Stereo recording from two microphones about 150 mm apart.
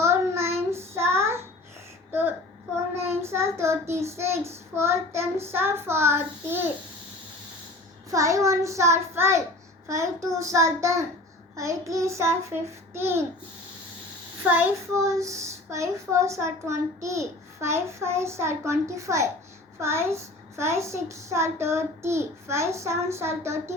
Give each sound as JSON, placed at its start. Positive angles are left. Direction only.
{"t": 0.0, "sound": "child singing", "side_deg": -15}
{"t": 2.9, "sound": "child singing", "side_deg": -15}
{"t": 8.1, "sound": "a woman's voice", "side_deg": -20}
{"t": 14.4, "sound": "a child's voice", "side_deg": -10}